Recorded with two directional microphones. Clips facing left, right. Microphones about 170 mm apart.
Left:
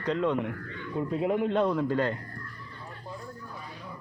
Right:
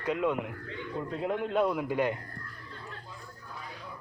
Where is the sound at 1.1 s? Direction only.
5° left (ahead or behind); by 2.1 s 15° right (ahead or behind).